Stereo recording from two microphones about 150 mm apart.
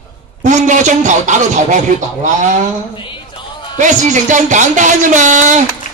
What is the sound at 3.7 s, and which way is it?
Speech, 55° right (ahead or behind).